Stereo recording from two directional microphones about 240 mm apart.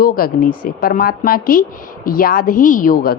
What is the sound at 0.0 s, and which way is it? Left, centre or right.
A woman's voice, left.